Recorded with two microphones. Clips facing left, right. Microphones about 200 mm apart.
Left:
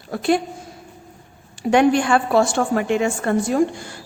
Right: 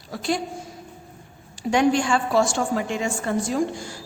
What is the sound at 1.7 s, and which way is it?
A woman's voice, 60° left (ahead or behind).